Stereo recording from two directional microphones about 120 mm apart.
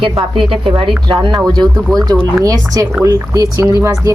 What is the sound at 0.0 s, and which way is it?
A woman's voice, 45° right (ahead or behind).